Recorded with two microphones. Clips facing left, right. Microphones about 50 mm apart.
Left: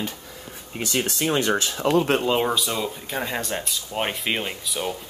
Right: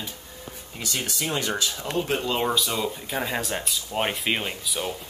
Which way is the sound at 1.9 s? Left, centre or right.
Left.